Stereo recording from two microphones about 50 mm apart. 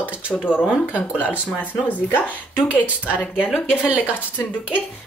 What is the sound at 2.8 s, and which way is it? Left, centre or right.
Speech, right.